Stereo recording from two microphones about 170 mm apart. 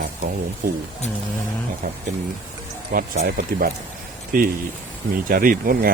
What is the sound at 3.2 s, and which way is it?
Speech, 60° right (ahead or behind).